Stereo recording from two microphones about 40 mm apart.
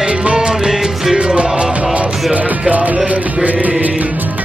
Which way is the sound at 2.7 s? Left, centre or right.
Right.